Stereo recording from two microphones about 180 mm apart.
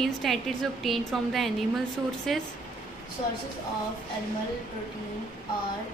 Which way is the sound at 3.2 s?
40° left (ahead or behind).